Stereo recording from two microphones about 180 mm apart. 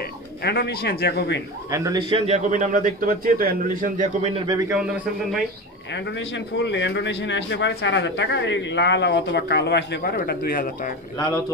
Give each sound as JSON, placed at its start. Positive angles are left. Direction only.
{"t": 0.4, "sound": "a man's voice", "side_deg": 60}
{"t": 1.7, "sound": "a man's voice", "side_deg": -20}
{"t": 4.5, "sound": "a man's voice", "side_deg": -20}
{"t": 5.9, "sound": "a man's voice", "side_deg": 80}
{"t": 10.1, "sound": "a man's voice", "side_deg": 60}